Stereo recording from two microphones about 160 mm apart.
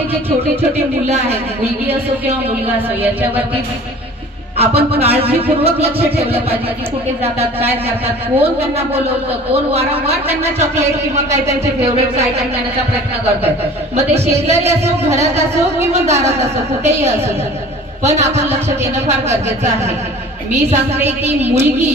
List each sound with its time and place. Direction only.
3.0 s a sound: 10° right (ahead or behind)
4.6 s speech: 40° right (ahead or behind)
8.4 s speech: 40° right (ahead or behind)
14.3 s a man's voice: 40° right (ahead or behind)
21.2 s a man's voice: 45° right (ahead or behind)